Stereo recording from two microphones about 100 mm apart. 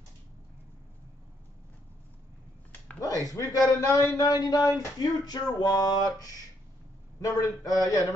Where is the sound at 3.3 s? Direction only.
30° left (ahead or behind).